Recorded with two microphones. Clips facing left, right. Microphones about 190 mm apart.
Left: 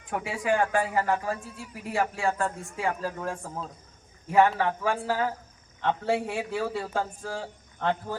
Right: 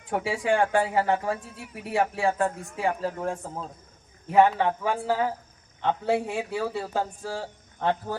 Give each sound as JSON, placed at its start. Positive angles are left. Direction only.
{"t": 0.1, "sound": "speech", "side_deg": -25}
{"t": 1.4, "sound": "speech", "side_deg": -70}
{"t": 2.0, "sound": "a man's voice", "side_deg": -20}